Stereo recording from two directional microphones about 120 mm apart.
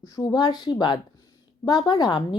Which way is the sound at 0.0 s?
35° left (ahead or behind).